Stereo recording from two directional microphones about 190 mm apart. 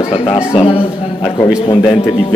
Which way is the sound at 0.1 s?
30° left (ahead or behind).